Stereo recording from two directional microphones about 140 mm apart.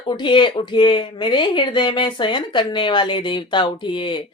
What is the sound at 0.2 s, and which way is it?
Speech, 35° left (ahead or behind).